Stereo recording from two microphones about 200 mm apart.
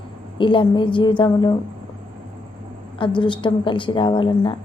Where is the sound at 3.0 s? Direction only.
25° left (ahead or behind).